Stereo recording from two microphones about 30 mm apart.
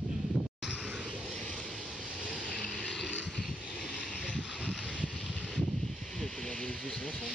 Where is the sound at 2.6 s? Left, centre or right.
Centre.